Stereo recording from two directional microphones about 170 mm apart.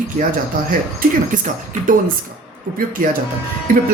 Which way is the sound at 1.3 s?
50° right (ahead or behind).